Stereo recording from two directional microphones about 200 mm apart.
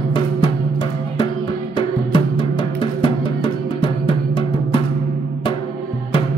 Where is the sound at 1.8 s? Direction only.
25° left (ahead or behind).